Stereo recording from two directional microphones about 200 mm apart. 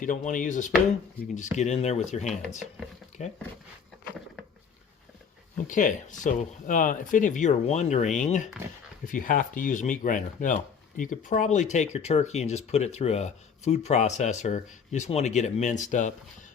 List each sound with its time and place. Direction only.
0.0 s speech: 40° left (ahead or behind)
5.6 s speech: 40° left (ahead or behind)